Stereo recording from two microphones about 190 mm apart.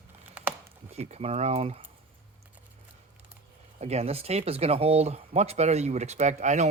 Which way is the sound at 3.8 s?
35° right (ahead or behind).